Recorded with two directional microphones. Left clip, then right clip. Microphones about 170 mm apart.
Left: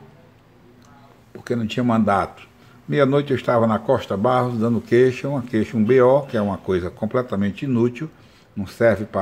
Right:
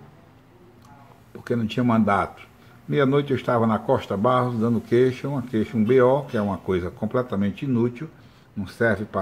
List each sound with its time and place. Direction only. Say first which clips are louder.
1.4 s a man's voice: left 2 dB; 5° left (ahead or behind)
7.7 s a man's voice: left 4 dB; 25° left (ahead or behind)